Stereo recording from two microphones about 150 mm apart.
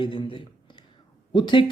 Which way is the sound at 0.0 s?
35° left (ahead or behind).